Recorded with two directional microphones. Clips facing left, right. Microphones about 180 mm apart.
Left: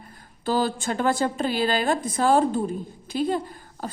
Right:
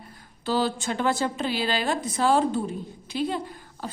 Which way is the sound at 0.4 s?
50° left (ahead or behind).